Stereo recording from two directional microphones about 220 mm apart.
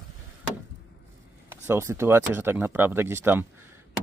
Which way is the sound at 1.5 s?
10° right (ahead or behind).